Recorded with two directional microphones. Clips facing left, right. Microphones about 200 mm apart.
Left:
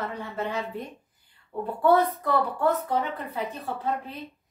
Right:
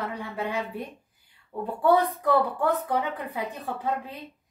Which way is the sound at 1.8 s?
15° right (ahead or behind).